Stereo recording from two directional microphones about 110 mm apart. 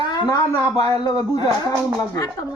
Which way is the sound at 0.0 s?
45° left (ahead or behind).